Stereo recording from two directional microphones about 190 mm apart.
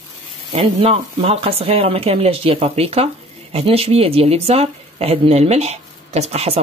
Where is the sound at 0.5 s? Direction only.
30° right (ahead or behind).